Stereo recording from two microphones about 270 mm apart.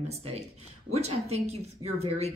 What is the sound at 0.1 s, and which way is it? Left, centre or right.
Speech, right.